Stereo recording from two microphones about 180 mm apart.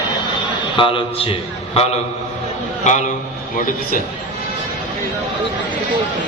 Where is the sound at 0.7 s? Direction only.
30° left (ahead or behind).